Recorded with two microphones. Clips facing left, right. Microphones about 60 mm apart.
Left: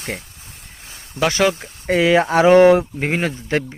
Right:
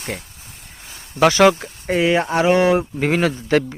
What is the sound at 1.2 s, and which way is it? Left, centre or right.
Speech, right.